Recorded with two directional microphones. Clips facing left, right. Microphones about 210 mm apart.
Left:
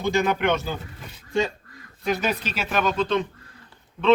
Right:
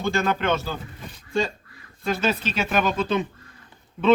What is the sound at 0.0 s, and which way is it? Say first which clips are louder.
Speech: left 2 dB; 15° left (ahead or behind).